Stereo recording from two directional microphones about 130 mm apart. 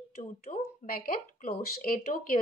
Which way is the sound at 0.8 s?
90° left.